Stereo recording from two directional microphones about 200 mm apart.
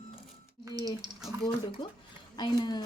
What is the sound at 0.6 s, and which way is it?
Speech, 20° right (ahead or behind).